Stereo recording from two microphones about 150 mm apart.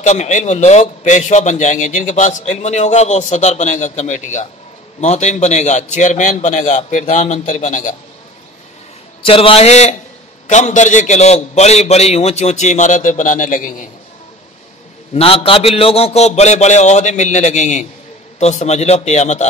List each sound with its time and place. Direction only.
0.0 s a man's voice: 50° left (ahead or behind)
9.2 s a man's voice: 40° left (ahead or behind); by 13.8 s 60° left (ahead or behind)
15.1 s a man's voice: 40° left (ahead or behind)